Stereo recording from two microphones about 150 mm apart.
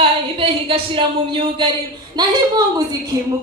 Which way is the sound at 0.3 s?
35° right (ahead or behind).